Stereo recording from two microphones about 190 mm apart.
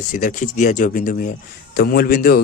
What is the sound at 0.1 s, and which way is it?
Speech, 45° left (ahead or behind).